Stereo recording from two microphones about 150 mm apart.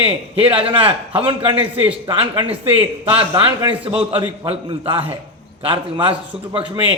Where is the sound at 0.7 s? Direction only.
35° right (ahead or behind).